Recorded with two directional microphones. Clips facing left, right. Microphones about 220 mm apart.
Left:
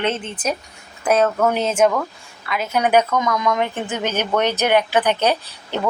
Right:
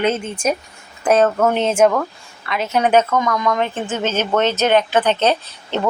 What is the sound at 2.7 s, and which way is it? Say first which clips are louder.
A woman's voice: right 2 dB; 10° left (ahead or behind).